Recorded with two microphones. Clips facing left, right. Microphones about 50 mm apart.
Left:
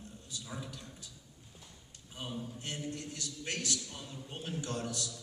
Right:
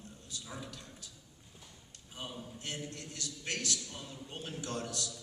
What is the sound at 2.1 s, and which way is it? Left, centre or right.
A man's voice, centre.